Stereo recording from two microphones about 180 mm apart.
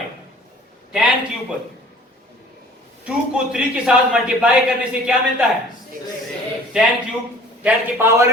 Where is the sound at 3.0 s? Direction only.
5° right (ahead or behind).